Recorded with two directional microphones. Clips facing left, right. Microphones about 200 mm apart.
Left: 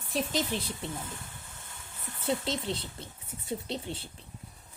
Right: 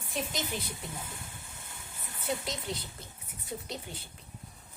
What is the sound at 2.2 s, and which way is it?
Speech, 25° left (ahead or behind).